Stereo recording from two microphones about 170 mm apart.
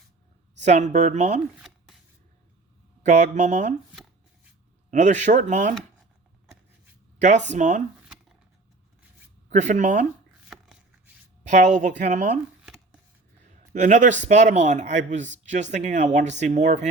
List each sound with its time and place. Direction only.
0.5 s speech: 45° right (ahead or behind)
1.5 s a sound: centre (ahead or behind)
3.1 s speech: 45° right (ahead or behind)
4.9 s speech: 45° right (ahead or behind)
7.2 s speech: 45° right (ahead or behind)
9.5 s speech: 45° right (ahead or behind)
10.5 s a sound: 5° right (ahead or behind)
11.4 s speech: 45° right (ahead or behind)
12.6 s a sound: 5° right (ahead or behind)
13.4 s a man's voice: 45° right (ahead or behind)